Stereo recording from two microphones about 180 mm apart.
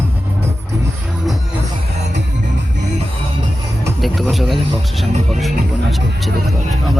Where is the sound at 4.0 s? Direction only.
Centre (ahead or behind).